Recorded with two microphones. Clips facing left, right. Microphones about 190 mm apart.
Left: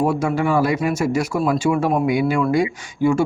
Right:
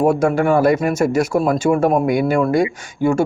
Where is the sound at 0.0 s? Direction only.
50° right (ahead or behind).